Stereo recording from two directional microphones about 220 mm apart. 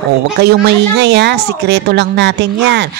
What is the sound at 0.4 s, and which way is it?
Speech, 50° right (ahead or behind).